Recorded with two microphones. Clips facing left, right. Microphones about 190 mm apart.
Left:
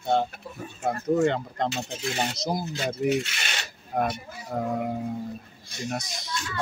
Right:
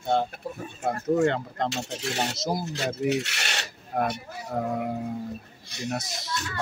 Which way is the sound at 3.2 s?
70° right (ahead or behind).